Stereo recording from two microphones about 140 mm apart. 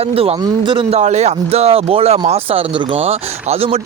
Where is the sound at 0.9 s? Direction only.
55° right (ahead or behind).